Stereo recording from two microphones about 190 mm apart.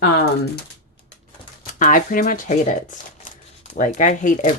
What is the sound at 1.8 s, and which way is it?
Speech, 45° left (ahead or behind).